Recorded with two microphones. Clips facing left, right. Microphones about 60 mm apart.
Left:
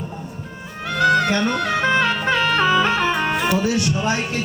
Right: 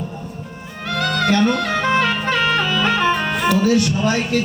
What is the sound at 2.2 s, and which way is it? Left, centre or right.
Music, left.